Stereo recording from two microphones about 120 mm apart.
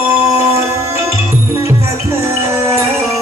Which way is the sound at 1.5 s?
25° right (ahead or behind).